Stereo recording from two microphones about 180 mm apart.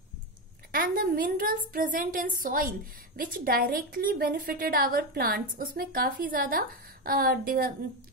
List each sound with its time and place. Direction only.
0.7 s a woman's voice: 55° right (ahead or behind)